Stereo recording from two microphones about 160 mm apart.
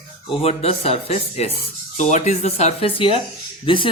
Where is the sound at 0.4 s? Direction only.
40° left (ahead or behind).